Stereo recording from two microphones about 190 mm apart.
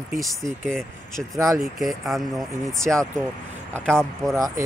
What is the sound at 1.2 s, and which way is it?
Speech, 15° right (ahead or behind).